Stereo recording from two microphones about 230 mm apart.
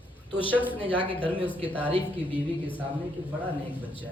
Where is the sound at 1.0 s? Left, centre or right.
Left.